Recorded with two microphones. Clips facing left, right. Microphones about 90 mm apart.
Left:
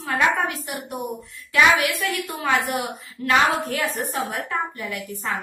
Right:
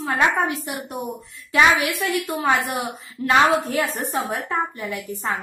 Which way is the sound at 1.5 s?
25° right (ahead or behind).